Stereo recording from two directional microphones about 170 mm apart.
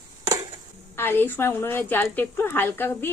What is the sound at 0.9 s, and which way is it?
A woman's voice, 15° left (ahead or behind).